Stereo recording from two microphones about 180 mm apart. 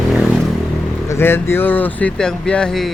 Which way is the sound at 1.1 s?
15° left (ahead or behind).